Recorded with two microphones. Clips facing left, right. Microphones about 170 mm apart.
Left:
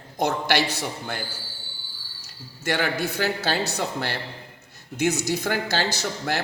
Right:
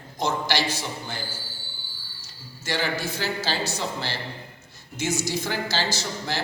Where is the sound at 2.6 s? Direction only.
60° left (ahead or behind).